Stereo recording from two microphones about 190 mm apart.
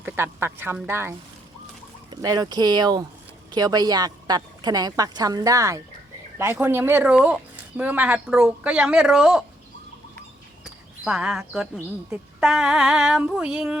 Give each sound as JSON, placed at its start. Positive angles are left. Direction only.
{"t": 0.0, "sound": "a woman's voice", "side_deg": -10}
{"t": 2.2, "sound": "a woman's voice", "side_deg": -20}
{"t": 11.0, "sound": "female singing", "side_deg": -5}